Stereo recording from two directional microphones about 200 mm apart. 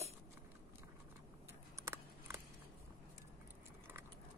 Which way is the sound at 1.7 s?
15° right (ahead or behind).